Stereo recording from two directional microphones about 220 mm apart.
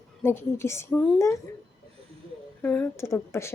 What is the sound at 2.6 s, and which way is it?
Speech, 10° left (ahead or behind).